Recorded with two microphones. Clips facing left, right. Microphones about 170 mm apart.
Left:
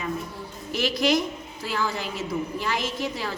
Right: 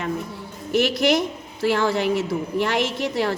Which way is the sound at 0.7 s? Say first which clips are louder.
Right 4 dB; 65° right (ahead or behind).